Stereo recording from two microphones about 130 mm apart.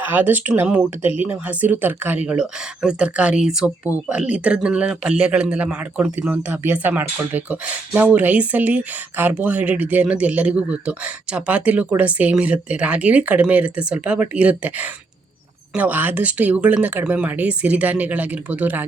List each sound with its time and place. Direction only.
0.0 s a man's voice: 15° right (ahead or behind)